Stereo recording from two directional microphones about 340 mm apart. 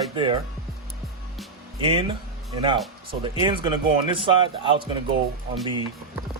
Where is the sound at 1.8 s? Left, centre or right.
Centre.